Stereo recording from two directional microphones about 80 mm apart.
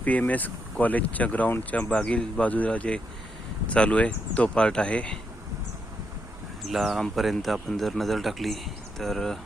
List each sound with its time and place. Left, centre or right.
0.0 s speech: centre
6.7 s speech: centre